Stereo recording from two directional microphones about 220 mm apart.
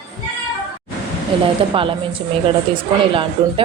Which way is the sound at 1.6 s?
25° right (ahead or behind).